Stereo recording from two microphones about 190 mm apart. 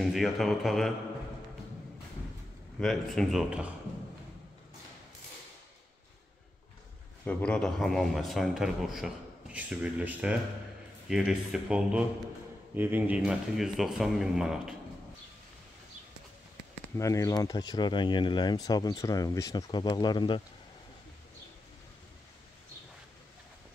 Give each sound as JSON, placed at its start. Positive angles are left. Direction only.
{"t": 0.0, "sound": "a man's voice", "side_deg": 0}
{"t": 2.8, "sound": "a man's voice", "side_deg": 0}
{"t": 7.2, "sound": "a man's voice", "side_deg": 5}
{"t": 16.9, "sound": "speech", "side_deg": 15}